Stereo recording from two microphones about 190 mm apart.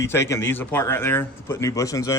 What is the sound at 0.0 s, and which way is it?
A man's voice, 15° left (ahead or behind).